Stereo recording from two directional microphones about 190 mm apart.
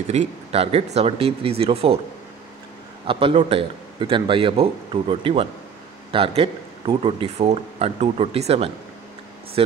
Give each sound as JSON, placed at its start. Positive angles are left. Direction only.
{"t": 0.1, "sound": "speech", "side_deg": -30}
{"t": 3.1, "sound": "a man's voice", "side_deg": -30}